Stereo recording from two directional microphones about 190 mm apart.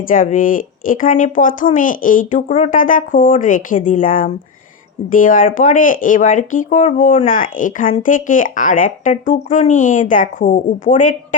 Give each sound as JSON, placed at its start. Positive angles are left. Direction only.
{"t": 0.0, "sound": "speech", "side_deg": 45}